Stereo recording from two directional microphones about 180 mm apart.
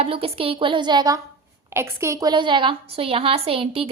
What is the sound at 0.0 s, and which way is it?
A woman's voice, 30° right (ahead or behind).